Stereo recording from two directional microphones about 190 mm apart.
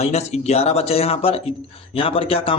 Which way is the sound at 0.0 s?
35° left (ahead or behind).